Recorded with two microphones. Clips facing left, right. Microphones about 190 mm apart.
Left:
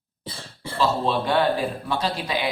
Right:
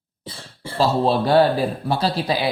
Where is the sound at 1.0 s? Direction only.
35° right (ahead or behind).